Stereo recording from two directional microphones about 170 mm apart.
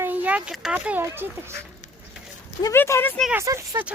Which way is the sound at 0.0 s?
10° right (ahead or behind).